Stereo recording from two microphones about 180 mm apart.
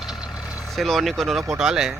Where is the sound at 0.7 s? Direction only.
Centre (ahead or behind).